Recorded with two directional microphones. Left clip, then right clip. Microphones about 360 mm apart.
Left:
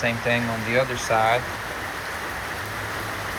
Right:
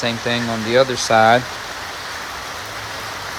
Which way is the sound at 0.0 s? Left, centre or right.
Right.